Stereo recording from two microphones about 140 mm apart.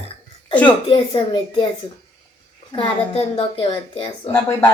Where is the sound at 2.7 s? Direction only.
45° left (ahead or behind).